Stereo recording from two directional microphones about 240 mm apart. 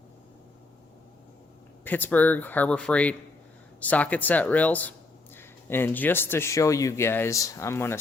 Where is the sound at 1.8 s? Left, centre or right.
Centre.